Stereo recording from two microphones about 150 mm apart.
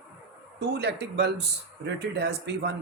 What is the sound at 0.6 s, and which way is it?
A man's voice, 90° right.